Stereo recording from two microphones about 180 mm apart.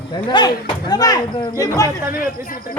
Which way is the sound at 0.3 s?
20° left (ahead or behind).